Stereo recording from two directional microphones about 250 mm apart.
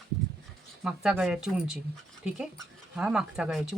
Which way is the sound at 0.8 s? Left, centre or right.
Centre.